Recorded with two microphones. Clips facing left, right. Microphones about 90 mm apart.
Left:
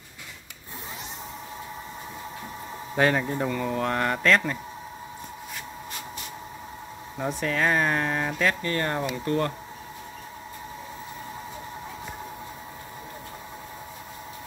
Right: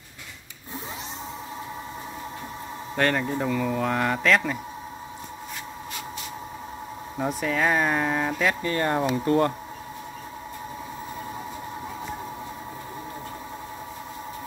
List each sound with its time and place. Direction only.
3.0 s speech: 5° left (ahead or behind)
7.2 s speech: 5° right (ahead or behind)